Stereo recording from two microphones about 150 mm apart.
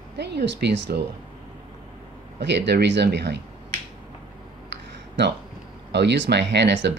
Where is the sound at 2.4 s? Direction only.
90° right.